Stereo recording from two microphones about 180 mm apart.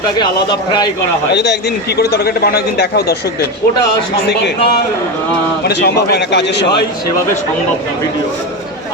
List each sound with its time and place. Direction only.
0.2 s speech: 25° left (ahead or behind)
1.3 s a man's voice: 65° left (ahead or behind)
4.3 s a man's voice: 70° left (ahead or behind)